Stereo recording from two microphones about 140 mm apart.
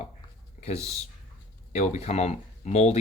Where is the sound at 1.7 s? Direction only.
50° left (ahead or behind).